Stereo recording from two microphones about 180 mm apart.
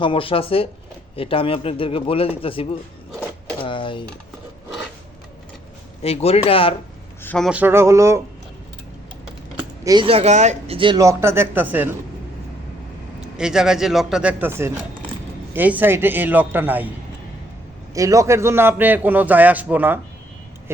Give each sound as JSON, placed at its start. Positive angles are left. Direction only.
{"t": 0.0, "sound": "a man's voice", "side_deg": 30}
{"t": 3.6, "sound": "a sound", "side_deg": 25}
{"t": 6.0, "sound": "a man's voice", "side_deg": 35}
{"t": 7.2, "sound": "a man's voice", "side_deg": 5}
{"t": 7.5, "sound": "a man's voice", "side_deg": -10}
{"t": 9.8, "sound": "speech", "side_deg": -25}
{"t": 13.3, "sound": "a man's voice", "side_deg": -5}
{"t": 17.9, "sound": "a man's voice", "side_deg": -20}